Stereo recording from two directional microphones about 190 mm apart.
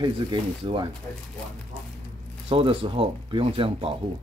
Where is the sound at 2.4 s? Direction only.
30° right (ahead or behind).